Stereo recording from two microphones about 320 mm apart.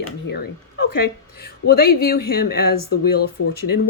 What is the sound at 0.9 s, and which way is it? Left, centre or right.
Speech, left.